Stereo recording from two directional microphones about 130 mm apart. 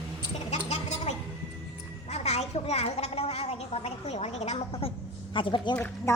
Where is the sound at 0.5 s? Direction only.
60° left (ahead or behind).